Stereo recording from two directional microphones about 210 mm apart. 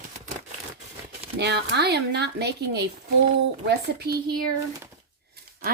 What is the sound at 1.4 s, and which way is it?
Speech, 55° right (ahead or behind).